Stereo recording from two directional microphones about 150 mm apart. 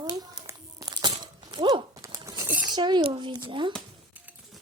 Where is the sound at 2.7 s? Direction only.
30° right (ahead or behind).